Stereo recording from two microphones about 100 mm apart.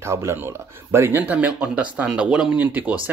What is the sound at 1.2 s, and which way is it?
Speech, 15° right (ahead or behind).